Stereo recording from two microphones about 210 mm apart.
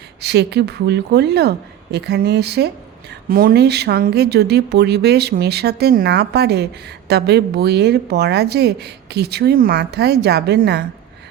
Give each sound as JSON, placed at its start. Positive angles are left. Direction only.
{"t": 0.2, "sound": "a woman's voice", "side_deg": -50}